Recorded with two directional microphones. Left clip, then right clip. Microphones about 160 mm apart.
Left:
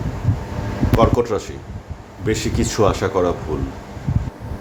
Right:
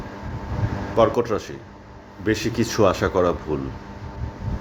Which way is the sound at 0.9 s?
15° right (ahead or behind).